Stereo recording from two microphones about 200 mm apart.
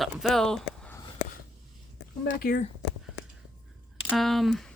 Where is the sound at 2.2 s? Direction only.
45° left (ahead or behind).